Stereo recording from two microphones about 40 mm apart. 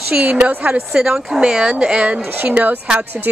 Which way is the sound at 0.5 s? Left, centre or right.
Right.